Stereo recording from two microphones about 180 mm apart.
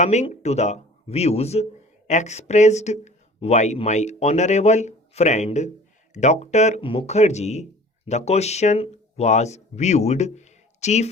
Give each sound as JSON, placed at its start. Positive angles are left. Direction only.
{"t": 0.0, "sound": "speech", "side_deg": 40}